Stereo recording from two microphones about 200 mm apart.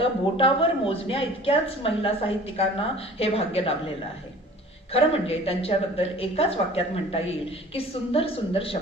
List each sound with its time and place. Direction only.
0.0 s a woman's voice: 25° left (ahead or behind)
4.9 s a woman's voice: 30° left (ahead or behind)